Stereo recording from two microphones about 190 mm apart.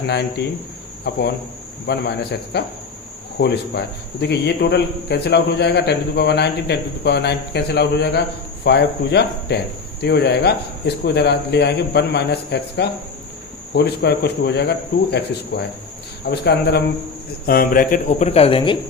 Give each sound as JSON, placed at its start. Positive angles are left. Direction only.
{"t": 0.1, "sound": "a man's voice", "side_deg": 60}